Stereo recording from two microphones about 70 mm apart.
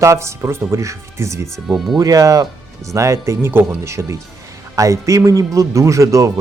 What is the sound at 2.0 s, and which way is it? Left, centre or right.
Speech, right.